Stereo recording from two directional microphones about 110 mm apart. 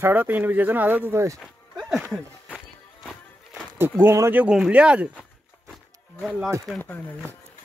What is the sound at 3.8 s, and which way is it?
Speech, 20° right (ahead or behind).